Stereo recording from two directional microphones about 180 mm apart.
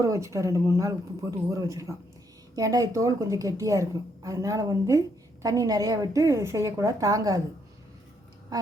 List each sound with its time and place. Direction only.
0.0 s a woman's voice: 15° right (ahead or behind)